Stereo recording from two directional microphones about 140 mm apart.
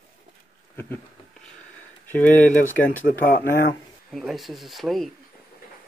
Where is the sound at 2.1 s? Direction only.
10° left (ahead or behind).